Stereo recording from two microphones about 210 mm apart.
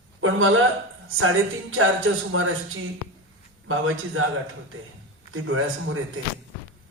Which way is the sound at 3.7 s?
80° right.